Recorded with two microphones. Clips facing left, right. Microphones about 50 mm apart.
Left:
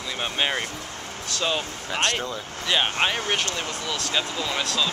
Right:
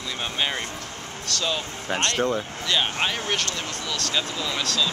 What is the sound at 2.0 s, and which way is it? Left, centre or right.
Speech, centre.